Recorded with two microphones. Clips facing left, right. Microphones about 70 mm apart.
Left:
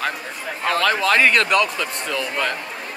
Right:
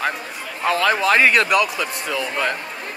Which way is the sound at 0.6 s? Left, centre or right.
Centre.